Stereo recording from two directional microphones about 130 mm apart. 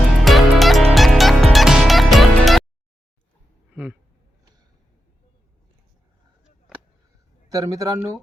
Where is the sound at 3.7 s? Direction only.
10° right (ahead or behind).